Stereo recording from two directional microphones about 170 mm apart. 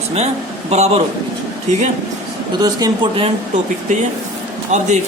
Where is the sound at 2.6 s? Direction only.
20° right (ahead or behind).